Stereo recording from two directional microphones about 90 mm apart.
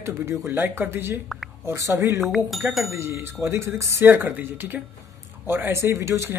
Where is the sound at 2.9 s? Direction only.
30° right (ahead or behind).